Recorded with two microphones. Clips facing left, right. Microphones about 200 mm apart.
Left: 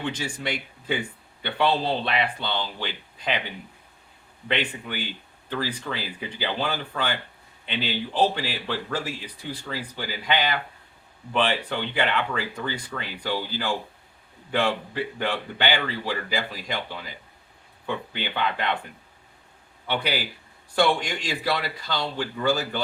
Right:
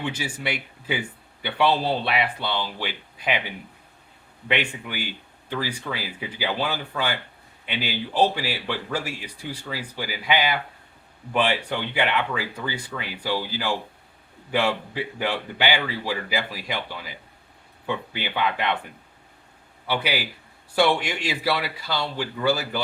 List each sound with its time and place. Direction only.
0.0 s speech: 10° right (ahead or behind)
4.4 s speech: 10° right (ahead or behind)
11.9 s speech: 10° right (ahead or behind)
17.8 s speech: 10° right (ahead or behind)
19.9 s speech: 5° right (ahead or behind)